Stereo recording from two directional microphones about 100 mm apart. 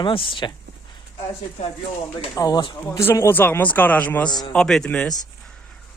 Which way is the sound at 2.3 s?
35° left (ahead or behind).